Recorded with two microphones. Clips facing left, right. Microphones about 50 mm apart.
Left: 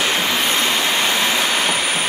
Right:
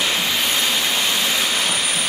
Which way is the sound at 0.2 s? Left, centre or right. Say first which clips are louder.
Left 2 dB; left.